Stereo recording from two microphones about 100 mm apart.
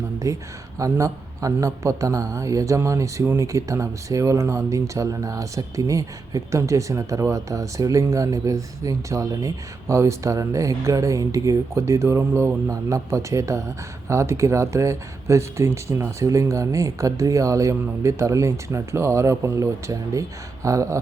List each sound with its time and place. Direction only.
0.2 s speech: 30° right (ahead or behind)